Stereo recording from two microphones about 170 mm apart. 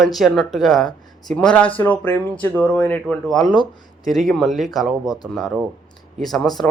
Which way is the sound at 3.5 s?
25° left (ahead or behind).